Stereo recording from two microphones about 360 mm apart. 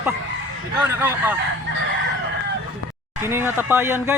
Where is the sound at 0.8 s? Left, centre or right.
Centre.